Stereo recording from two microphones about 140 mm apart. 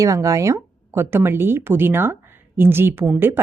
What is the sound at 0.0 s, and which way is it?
Speech, 25° right (ahead or behind).